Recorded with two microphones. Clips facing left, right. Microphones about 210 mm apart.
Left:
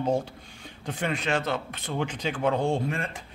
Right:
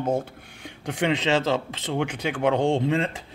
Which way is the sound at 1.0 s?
90° right.